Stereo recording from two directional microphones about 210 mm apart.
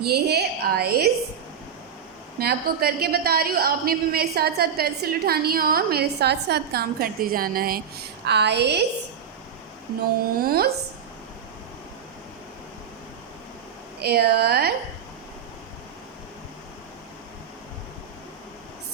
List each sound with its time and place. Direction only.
0.0 s a woman's voice: 50° right (ahead or behind)
2.4 s a woman's voice: 50° right (ahead or behind)
10.4 s a woman's voice: 45° right (ahead or behind)
14.0 s a woman's voice: 50° right (ahead or behind)